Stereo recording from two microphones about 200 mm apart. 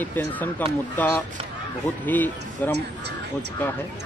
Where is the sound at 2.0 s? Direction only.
10° left (ahead or behind).